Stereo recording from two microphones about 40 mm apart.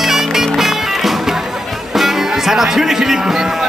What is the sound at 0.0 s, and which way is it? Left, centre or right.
Music, centre.